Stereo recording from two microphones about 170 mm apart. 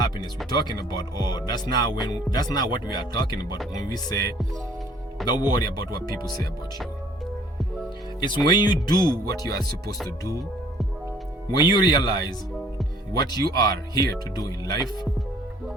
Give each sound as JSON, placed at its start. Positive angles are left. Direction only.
{"t": 0.5, "sound": "speech", "side_deg": 25}
{"t": 5.2, "sound": "speech", "side_deg": 25}
{"t": 8.2, "sound": "speech", "side_deg": 25}
{"t": 11.6, "sound": "speech", "side_deg": 25}